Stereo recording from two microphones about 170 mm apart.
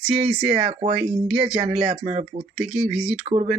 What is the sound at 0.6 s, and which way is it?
Speech, 35° right (ahead or behind).